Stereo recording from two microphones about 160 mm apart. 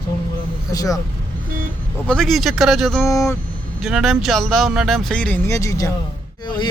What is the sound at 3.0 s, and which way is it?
Speech, 20° left (ahead or behind).